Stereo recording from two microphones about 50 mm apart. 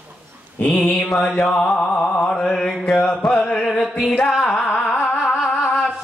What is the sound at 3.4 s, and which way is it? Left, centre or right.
Music, left.